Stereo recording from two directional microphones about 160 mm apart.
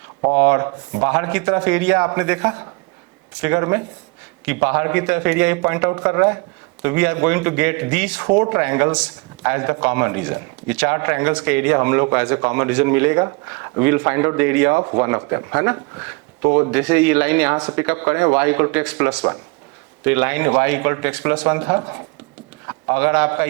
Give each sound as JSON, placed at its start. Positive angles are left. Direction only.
{"t": 0.3, "sound": "speech", "side_deg": -10}